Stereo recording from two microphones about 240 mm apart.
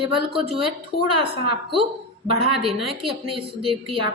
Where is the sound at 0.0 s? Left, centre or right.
Right.